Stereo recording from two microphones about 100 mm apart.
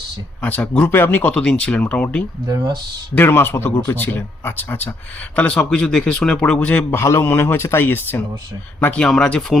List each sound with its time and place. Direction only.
0.4 s speech: 15° left (ahead or behind)
3.2 s speech: 20° left (ahead or behind)
6.9 s speech: 25° left (ahead or behind); by 9.6 s 5° left (ahead or behind)